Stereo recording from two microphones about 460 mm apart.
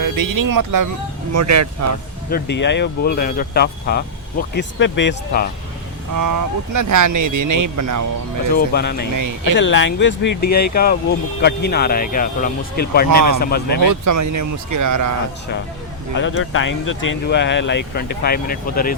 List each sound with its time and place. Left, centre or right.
0.0 s speech: right
2.3 s speech: left
6.1 s speech: right
8.5 s speech: left
9.1 s speech: right
9.6 s speech: left
13.1 s speech: right
13.4 s speech: centre
14.0 s speech: right
16.1 s speech: left